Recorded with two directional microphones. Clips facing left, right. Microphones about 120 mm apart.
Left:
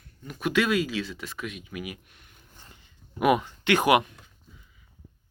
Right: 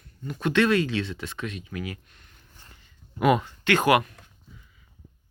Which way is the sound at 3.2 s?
15° left (ahead or behind).